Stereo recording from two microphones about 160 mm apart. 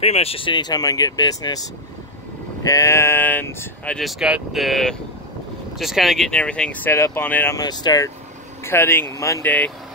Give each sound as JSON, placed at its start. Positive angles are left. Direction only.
{"t": 0.0, "sound": "speech", "side_deg": 40}
{"t": 7.5, "sound": "speech", "side_deg": 25}